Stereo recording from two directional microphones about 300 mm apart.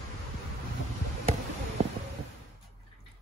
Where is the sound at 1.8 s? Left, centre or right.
Right.